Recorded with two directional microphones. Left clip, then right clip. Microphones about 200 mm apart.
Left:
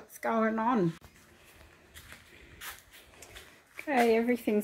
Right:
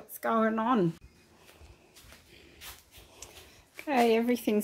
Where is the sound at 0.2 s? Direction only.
20° right (ahead or behind).